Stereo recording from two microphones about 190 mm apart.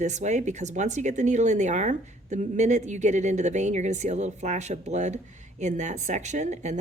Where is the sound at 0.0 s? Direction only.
40° right (ahead or behind).